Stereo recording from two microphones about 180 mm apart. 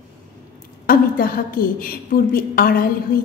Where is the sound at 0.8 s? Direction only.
55° left (ahead or behind).